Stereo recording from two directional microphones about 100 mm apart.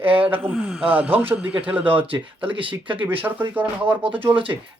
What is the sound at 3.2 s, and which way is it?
Speech, 20° right (ahead or behind).